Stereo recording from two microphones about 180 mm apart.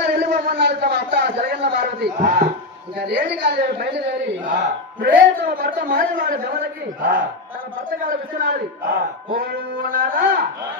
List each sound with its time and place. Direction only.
0.0 s a sound: 65° right (ahead or behind)
2.1 s a man's voice: 50° right (ahead or behind)
3.2 s a woman's voice: 65° right (ahead or behind)
5.0 s a man's voice: 50° right (ahead or behind)